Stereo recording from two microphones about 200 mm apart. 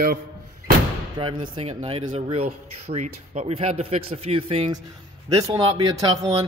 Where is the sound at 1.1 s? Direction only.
25° right (ahead or behind).